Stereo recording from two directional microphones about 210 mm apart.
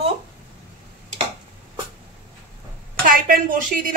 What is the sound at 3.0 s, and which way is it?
Speech, 40° right (ahead or behind).